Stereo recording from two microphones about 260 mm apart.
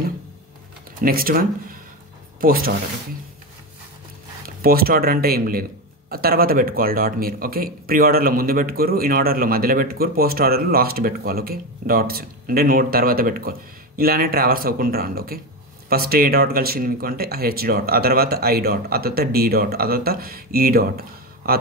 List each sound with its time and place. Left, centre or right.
1.0 s a man's voice: right
4.6 s a man's voice: right